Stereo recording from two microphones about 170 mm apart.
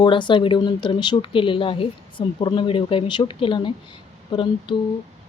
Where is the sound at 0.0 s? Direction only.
30° left (ahead or behind).